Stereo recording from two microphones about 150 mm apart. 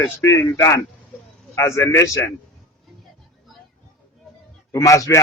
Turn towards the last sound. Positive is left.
turn(degrees=20)  # may be behind; listen again after turning